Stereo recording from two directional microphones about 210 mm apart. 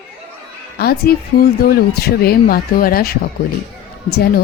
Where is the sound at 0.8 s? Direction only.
50° left (ahead or behind).